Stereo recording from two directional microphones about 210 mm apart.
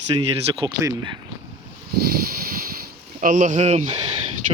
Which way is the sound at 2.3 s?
45° right (ahead or behind).